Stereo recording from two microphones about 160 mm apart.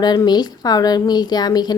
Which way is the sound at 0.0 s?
25° left (ahead or behind).